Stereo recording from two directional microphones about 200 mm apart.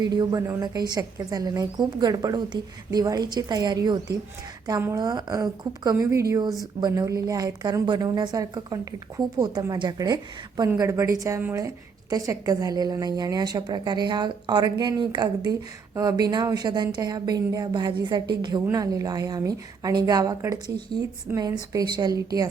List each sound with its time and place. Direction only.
0.0 s a woman's voice: 20° right (ahead or behind)